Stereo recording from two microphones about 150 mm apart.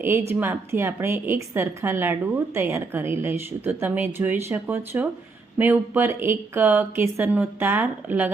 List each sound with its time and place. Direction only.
0.0 s a woman's voice: 15° right (ahead or behind)